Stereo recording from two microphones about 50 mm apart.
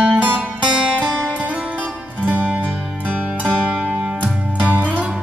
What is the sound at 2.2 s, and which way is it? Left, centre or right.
Music, right.